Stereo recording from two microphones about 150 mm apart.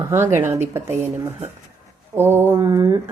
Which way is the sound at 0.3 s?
15° right (ahead or behind).